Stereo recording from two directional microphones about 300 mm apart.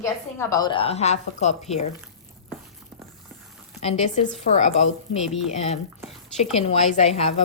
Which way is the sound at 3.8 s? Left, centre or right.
Left.